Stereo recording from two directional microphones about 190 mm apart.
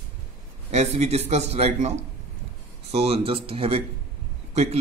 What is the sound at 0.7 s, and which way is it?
Speech, 35° right (ahead or behind).